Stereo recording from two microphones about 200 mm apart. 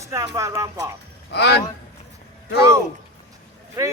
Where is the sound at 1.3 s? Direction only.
55° left (ahead or behind).